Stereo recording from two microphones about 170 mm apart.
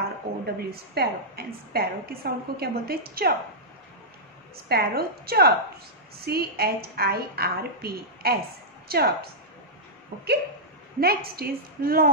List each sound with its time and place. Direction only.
0.3 s a sound: 65° right (ahead or behind)
0.6 s a woman's voice: 65° right (ahead or behind)
4.6 s a woman's voice: 65° right (ahead or behind)
11.0 s a woman's voice: 65° right (ahead or behind)